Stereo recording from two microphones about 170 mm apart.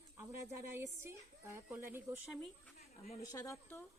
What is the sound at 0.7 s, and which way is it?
A woman's voice, 15° right (ahead or behind).